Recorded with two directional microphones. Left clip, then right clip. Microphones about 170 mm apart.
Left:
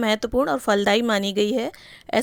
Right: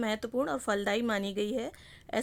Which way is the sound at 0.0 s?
30° left (ahead or behind).